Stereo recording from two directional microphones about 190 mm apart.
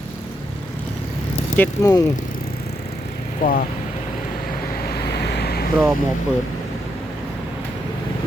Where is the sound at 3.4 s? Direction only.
50° left (ahead or behind).